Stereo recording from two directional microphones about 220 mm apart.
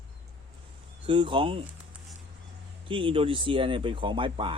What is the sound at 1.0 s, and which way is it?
Speech, 20° right (ahead or behind).